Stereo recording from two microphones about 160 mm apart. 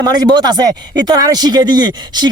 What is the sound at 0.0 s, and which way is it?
Speech, 25° right (ahead or behind).